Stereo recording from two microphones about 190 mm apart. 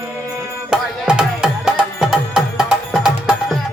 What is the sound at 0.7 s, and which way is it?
Music, 5° right (ahead or behind).